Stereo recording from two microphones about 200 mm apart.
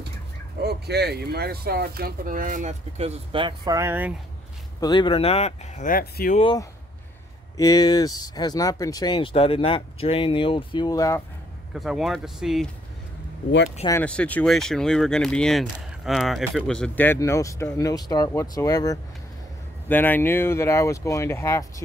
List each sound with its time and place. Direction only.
0.6 s speech: 55° right (ahead or behind); by 4.1 s 10° right (ahead or behind)
4.7 s speech: 20° left (ahead or behind); by 6.4 s 45° left (ahead or behind)
6.4 s speech: 20° left (ahead or behind)
11.7 s speech: centre (ahead or behind)
13.8 s speech: 10° left (ahead or behind)